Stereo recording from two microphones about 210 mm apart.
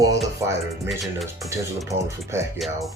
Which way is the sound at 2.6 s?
Centre (ahead or behind).